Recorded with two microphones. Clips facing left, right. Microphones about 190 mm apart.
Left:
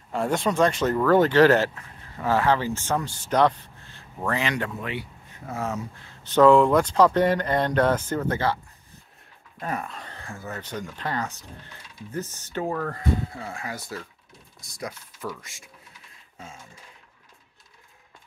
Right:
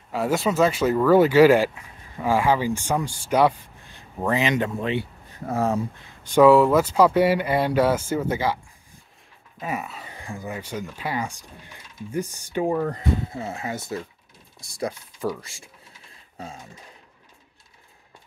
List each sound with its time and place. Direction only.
0.1 s speech: 5° right (ahead or behind); by 5.9 s 35° right (ahead or behind)
6.2 s speech: 10° right (ahead or behind)
9.6 s speech: 5° right (ahead or behind); by 16.6 s 35° right (ahead or behind)